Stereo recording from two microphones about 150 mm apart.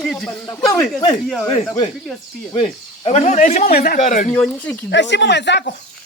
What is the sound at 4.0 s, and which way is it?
Speech, 55° left (ahead or behind).